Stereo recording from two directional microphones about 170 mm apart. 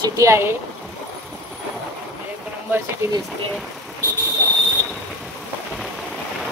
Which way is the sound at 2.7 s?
15° right (ahead or behind).